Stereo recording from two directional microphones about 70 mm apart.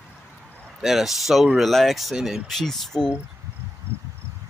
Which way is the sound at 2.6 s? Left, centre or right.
Centre.